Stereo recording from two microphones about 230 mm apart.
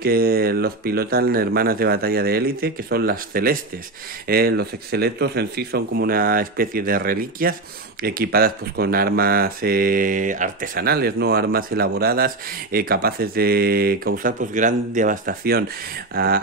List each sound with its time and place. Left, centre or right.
0.0 s speech: right